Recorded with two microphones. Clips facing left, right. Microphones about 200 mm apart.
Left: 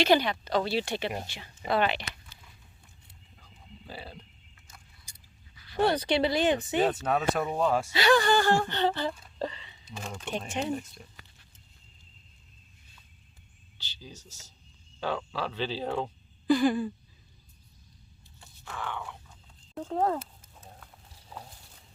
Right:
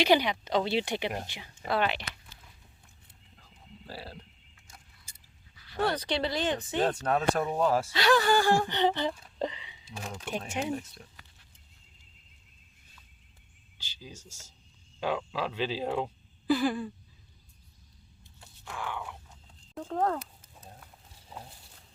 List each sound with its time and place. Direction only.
0.0 s speech: 15° right (ahead or behind)
1.7 s speech: centre (ahead or behind)
3.3 s a sound: centre (ahead or behind)
5.9 s speech: 10° left (ahead or behind)
13.7 s speech: 10° right (ahead or behind)
18.3 s a sound: 10° right (ahead or behind)
19.8 s speech: 5° left (ahead or behind)